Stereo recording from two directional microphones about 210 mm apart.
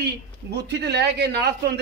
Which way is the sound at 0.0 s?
55° right (ahead or behind).